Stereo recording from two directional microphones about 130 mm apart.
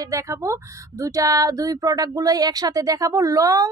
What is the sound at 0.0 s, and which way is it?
Speech, 25° right (ahead or behind).